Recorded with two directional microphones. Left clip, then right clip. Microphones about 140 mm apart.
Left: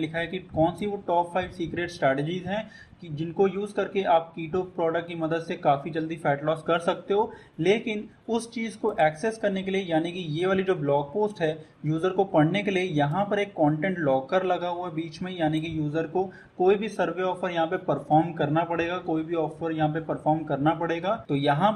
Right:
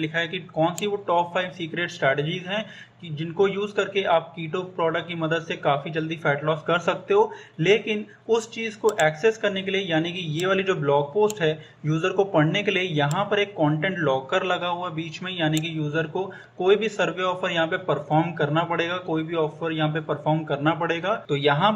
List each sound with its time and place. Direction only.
0.0 s speech: 35° left (ahead or behind)